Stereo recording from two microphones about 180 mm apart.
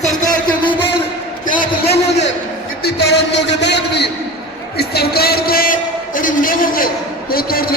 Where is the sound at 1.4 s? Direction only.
50° left (ahead or behind).